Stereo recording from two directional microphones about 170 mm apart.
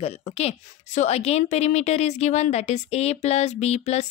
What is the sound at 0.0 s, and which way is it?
A woman's voice, 40° left (ahead or behind).